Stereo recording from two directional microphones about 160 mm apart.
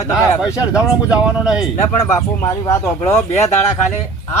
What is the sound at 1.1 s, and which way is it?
Speech, 5° right (ahead or behind).